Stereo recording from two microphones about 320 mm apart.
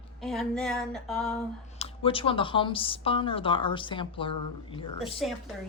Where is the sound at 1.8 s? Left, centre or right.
Centre.